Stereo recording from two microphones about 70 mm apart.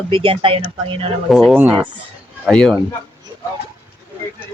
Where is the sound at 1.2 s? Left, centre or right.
Centre.